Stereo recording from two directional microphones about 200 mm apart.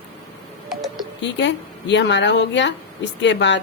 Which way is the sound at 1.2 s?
60° left (ahead or behind).